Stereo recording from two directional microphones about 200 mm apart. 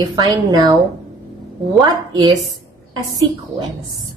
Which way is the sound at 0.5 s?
20° right (ahead or behind).